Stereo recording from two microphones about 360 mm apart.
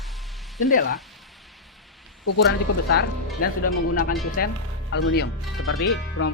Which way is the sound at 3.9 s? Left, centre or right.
Left.